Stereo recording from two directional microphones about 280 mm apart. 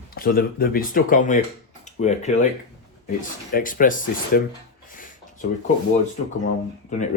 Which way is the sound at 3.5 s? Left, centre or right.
Left.